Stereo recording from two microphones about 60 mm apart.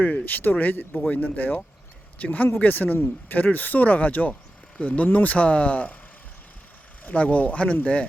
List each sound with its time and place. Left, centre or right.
0.0 s speech: left
7.0 s speech: left